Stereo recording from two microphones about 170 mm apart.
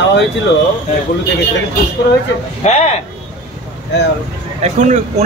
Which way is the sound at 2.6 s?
40° left (ahead or behind).